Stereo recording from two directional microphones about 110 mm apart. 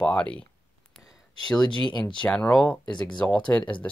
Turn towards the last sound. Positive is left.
turn(degrees=10)  # may be behind; listen again after turning